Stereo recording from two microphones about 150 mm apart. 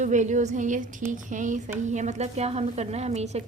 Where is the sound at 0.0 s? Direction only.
50° right (ahead or behind).